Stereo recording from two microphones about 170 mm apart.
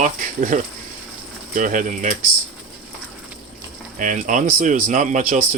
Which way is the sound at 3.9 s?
50° right (ahead or behind).